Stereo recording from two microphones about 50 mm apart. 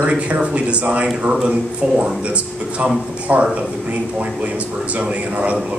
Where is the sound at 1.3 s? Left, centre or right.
Centre.